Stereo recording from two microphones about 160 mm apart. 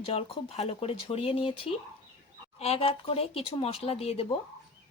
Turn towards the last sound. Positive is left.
turn(degrees=40)  # may be behind; listen again after turning